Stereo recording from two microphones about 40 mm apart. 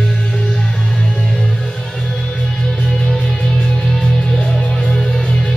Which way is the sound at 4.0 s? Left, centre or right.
Centre.